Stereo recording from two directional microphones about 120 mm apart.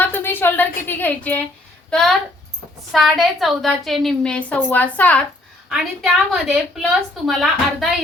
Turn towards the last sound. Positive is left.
turn(degrees=0)  # may be behind; listen again after turning